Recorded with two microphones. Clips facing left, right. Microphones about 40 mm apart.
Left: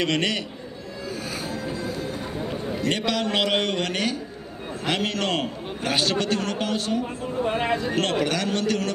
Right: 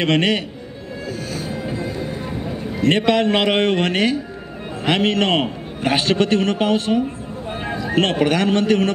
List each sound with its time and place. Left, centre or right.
0.0 s a man's voice: right
1.5 s music: right
2.8 s a man's voice: right
7.4 s a sound: left
7.9 s a man's voice: right